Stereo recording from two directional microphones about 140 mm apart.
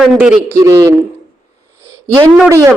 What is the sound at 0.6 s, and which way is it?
Speech, 25° right (ahead or behind).